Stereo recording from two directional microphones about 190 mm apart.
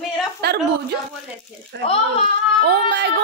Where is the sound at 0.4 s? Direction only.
60° right (ahead or behind).